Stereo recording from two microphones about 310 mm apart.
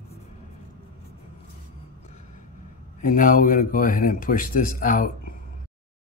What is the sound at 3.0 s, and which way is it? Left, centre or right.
Speech, left.